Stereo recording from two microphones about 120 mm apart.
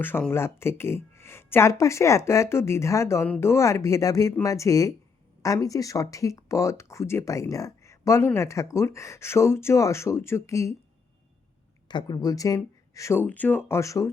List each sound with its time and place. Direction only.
0.3 s speech: 20° left (ahead or behind)
11.9 s speech: 40° left (ahead or behind)
13.2 s speech: 15° left (ahead or behind)